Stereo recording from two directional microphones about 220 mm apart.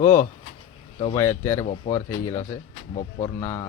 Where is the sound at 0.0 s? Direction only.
35° left (ahead or behind).